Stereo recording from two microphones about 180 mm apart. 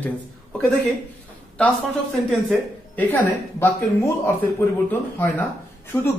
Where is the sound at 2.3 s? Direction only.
5° left (ahead or behind).